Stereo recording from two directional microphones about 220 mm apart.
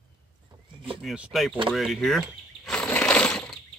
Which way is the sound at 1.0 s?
5° right (ahead or behind).